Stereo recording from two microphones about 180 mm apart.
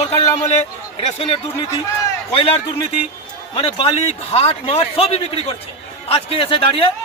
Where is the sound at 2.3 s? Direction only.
30° left (ahead or behind).